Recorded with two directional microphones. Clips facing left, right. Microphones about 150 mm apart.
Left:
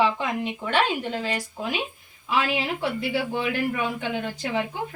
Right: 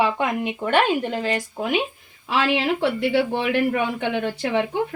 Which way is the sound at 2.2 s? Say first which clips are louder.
Right 4 dB; 80° right.